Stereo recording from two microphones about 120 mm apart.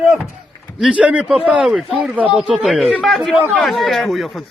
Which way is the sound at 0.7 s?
5° right (ahead or behind).